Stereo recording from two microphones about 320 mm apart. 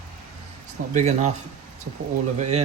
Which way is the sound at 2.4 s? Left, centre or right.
Right.